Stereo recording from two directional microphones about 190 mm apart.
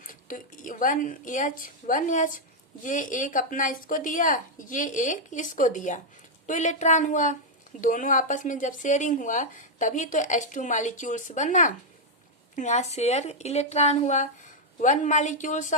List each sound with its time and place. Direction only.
0.0 s a woman's voice: 45° left (ahead or behind)